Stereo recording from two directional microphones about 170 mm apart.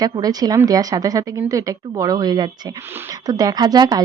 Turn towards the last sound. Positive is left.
turn(degrees=-25)  # may be behind; listen again after turning